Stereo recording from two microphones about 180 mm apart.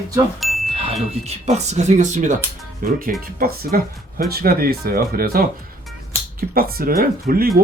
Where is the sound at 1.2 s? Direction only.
40° right (ahead or behind); by 5.4 s 55° right (ahead or behind).